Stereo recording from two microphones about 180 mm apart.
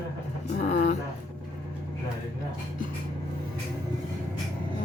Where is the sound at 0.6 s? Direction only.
40° left (ahead or behind).